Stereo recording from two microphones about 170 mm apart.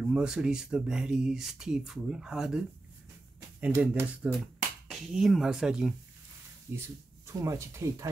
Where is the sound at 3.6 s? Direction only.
10° right (ahead or behind).